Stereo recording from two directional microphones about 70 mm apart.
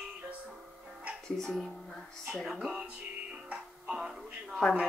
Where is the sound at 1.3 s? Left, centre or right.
Centre.